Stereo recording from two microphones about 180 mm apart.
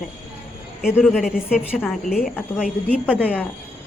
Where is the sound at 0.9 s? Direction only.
5° left (ahead or behind).